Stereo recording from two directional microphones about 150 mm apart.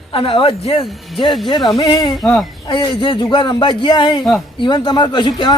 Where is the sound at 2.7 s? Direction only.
30° left (ahead or behind).